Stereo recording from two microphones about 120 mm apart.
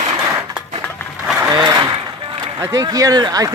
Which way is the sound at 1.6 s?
30° right (ahead or behind).